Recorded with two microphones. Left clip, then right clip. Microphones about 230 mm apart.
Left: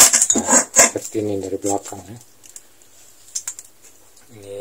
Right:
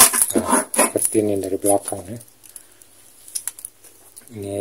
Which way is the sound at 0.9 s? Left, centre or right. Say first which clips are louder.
Right 3 dB; right.